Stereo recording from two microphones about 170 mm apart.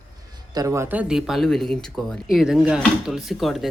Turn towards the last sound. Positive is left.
turn(degrees=0)  # may be behind; listen again after turning